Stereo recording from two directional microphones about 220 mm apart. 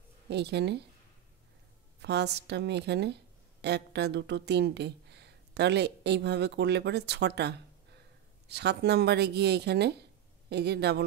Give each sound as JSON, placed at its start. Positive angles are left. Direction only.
{"t": 0.3, "sound": "speech", "side_deg": -50}
{"t": 2.0, "sound": "speech", "side_deg": -50}